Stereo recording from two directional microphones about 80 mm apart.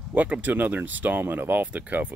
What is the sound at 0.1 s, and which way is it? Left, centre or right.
Speech, centre.